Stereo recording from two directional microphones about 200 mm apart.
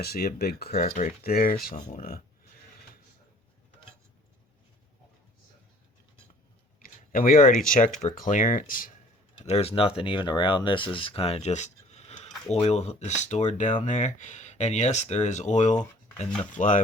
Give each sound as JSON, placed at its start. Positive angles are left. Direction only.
{"t": 0.0, "sound": "speech", "side_deg": 50}
{"t": 6.7, "sound": "speech", "side_deg": 45}
{"t": 9.5, "sound": "speech", "side_deg": 30}